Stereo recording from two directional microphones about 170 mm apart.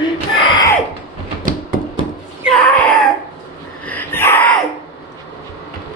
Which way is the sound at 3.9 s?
10° left (ahead or behind).